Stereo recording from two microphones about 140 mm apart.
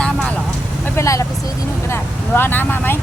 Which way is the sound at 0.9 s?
20° left (ahead or behind).